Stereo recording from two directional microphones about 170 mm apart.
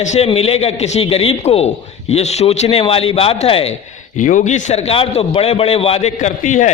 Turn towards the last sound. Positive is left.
turn(degrees=45)  # may be behind; listen again after turning